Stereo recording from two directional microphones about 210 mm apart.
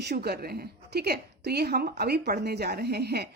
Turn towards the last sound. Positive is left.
turn(degrees=-50)  # may be behind; listen again after turning